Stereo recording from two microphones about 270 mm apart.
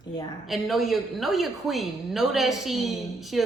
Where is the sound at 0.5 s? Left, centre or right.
Centre.